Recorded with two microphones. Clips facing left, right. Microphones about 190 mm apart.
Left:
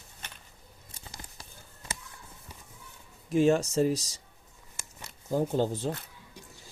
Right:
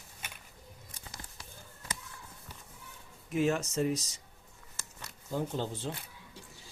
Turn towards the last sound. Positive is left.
turn(degrees=40)  # may be behind; listen again after turning